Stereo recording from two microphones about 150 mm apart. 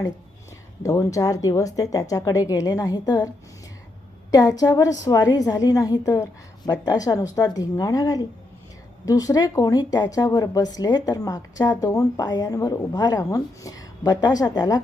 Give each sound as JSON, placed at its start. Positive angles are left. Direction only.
{"t": 0.8, "sound": "speech", "side_deg": 20}
{"t": 4.3, "sound": "speech", "side_deg": 25}